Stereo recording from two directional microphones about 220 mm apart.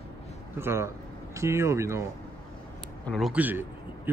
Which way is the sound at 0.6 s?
10° right (ahead or behind).